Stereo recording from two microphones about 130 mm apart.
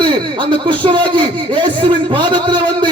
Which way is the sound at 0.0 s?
40° right (ahead or behind).